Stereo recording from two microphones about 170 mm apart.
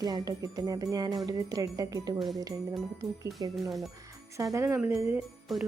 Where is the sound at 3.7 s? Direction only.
Centre (ahead or behind).